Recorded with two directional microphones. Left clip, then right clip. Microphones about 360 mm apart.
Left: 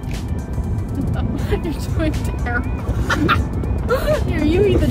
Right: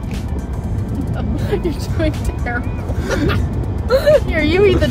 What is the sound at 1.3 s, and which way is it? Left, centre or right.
Speech, centre.